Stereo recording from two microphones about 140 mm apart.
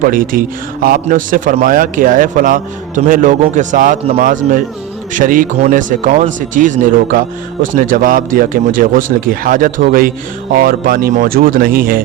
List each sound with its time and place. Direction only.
0.0 s speech: 90° right
1.1 s speech: 75° right (ahead or behind)